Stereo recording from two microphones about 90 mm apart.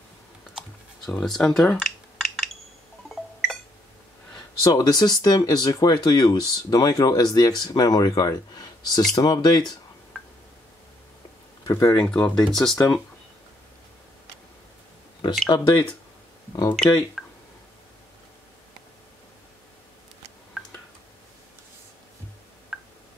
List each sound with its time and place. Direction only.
1.0 s computer keyboard: 5° left (ahead or behind)
3.1 s a sound: centre (ahead or behind)
4.6 s speech: 45° left (ahead or behind)
11.6 s speech: 40° left (ahead or behind)
12.0 s speech: 15° left (ahead or behind)
15.5 s speech: 50° left (ahead or behind)
16.7 s speech: 5° left (ahead or behind)
22.7 s tick: centre (ahead or behind)